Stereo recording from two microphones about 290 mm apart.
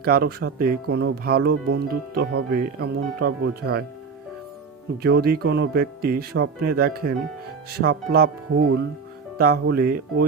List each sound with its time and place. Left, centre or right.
0.0 s speech: right
5.0 s speech: right